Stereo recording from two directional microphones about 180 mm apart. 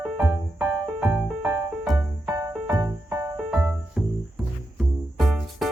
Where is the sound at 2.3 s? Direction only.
20° right (ahead or behind).